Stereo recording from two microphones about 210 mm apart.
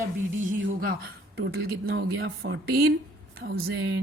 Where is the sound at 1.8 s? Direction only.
55° right (ahead or behind).